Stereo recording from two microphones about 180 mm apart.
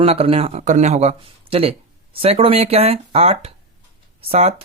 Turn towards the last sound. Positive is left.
turn(degrees=-35)  # may be behind; listen again after turning